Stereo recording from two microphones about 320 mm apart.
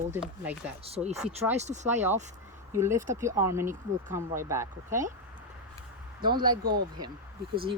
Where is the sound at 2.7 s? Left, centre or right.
Centre.